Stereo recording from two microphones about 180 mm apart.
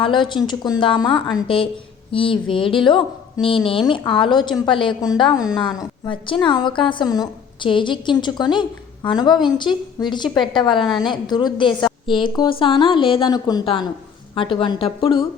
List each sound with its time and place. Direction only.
0.0 s a woman's voice: 25° left (ahead or behind)